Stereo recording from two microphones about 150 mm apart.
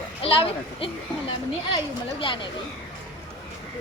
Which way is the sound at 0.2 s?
40° left (ahead or behind).